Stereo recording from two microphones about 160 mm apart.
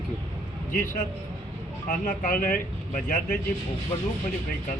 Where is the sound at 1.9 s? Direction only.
60° left (ahead or behind).